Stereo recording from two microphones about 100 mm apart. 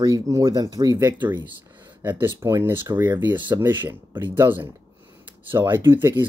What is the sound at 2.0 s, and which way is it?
Speech, 25° right (ahead or behind).